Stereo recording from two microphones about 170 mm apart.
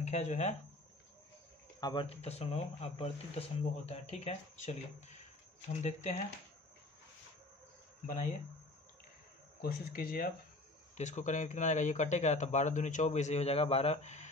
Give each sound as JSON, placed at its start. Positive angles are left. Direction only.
{"t": 0.0, "sound": "speech", "side_deg": 40}
{"t": 1.8, "sound": "speech", "side_deg": 25}
{"t": 2.0, "sound": "speech", "side_deg": 40}
{"t": 8.1, "sound": "speech", "side_deg": 45}
{"t": 9.6, "sound": "speech", "side_deg": 60}
{"t": 11.0, "sound": "speech", "side_deg": 45}